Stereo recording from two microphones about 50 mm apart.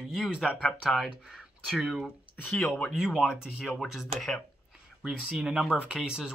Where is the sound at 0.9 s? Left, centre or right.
Centre.